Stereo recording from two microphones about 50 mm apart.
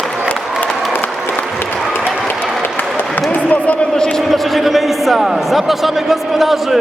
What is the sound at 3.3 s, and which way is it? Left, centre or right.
Basketball bounce, left.